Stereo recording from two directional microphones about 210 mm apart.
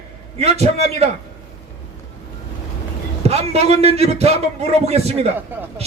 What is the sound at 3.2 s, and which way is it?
A man's voice, 30° right (ahead or behind).